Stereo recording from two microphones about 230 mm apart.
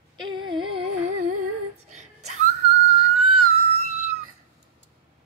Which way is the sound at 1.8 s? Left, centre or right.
Right.